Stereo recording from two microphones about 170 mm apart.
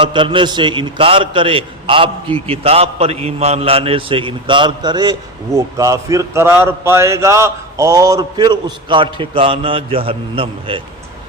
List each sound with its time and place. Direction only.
0.0 s a man's voice: 30° right (ahead or behind)